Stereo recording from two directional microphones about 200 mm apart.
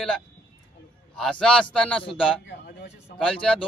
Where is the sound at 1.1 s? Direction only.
5° left (ahead or behind).